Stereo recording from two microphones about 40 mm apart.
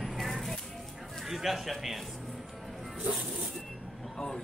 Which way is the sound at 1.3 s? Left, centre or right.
Centre.